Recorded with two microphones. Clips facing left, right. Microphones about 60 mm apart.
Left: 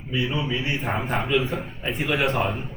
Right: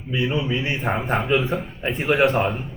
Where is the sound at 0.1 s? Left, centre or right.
Right.